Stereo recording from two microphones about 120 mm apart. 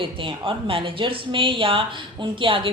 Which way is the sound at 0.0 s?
45° right (ahead or behind).